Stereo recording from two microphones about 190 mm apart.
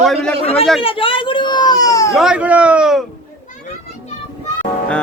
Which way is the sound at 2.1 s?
5° right (ahead or behind).